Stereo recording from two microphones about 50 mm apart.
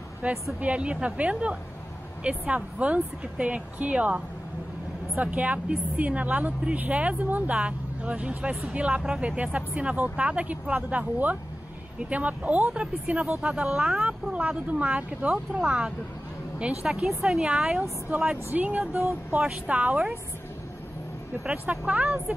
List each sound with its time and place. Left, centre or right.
0.2 s speech: right
9.4 s speech: right; by 14.0 s centre
14.0 s a woman's voice: right
18.1 s speech: right
21.5 s speech: right